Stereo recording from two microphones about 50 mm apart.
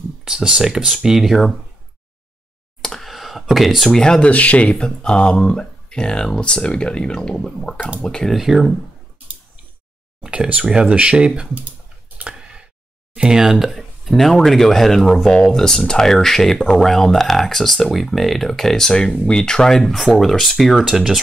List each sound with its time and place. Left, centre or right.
0.2 s speech: centre
2.8 s a sound: centre
4.0 s speech: centre
4.3 s speech: left; by 8.4 s centre
8.4 s speech: centre
10.2 s speech: centre
13.1 s speech: centre